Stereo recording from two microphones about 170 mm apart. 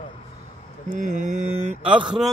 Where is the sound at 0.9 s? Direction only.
45° right (ahead or behind).